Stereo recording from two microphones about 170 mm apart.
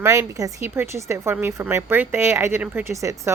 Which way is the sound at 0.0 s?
20° right (ahead or behind).